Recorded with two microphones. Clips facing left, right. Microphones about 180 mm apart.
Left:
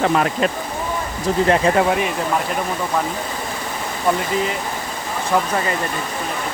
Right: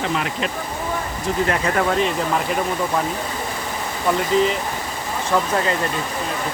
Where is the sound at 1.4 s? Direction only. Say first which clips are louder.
Left 6 dB; 25° left (ahead or behind).